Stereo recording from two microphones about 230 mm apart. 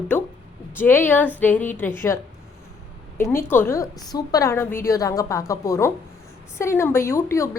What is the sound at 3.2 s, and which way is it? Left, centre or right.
A woman's voice, centre.